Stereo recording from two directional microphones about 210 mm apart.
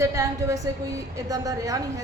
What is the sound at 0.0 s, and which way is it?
Speech, 15° right (ahead or behind).